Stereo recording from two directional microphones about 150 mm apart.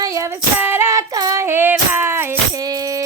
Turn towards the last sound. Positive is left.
turn(degrees=-25)  # may be behind; listen again after turning